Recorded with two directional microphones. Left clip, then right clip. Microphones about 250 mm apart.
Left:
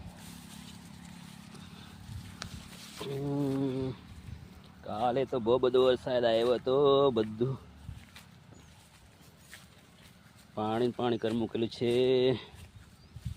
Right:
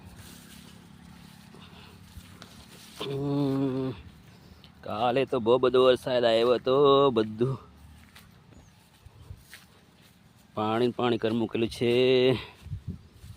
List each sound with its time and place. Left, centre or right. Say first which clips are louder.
2.4 s a sound: left 6 dB; centre
3.0 s mantra: right 5 dB; right
4.8 s speech: right 4 dB; right
10.5 s speech: right 4 dB; right